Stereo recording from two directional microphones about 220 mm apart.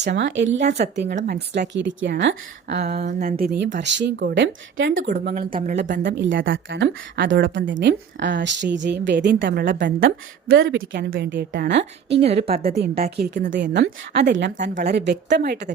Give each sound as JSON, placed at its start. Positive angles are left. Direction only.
{"t": 0.0, "sound": "a woman's voice", "side_deg": -55}
{"t": 3.0, "sound": "speech", "side_deg": -35}
{"t": 5.1, "sound": "a woman's voice", "side_deg": -40}
{"t": 6.0, "sound": "a woman's voice", "side_deg": -55}
{"t": 10.5, "sound": "speech", "side_deg": -55}
{"t": 12.5, "sound": "a woman's voice", "side_deg": -25}
{"t": 12.7, "sound": "speech", "side_deg": -45}